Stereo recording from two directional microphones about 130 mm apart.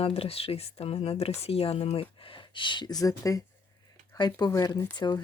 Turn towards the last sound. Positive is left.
turn(degrees=35)  # may be behind; listen again after turning